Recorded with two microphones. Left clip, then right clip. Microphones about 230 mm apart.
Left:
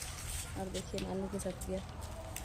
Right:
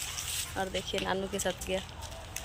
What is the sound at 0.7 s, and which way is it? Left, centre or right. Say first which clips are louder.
Speech: right 8 dB; centre.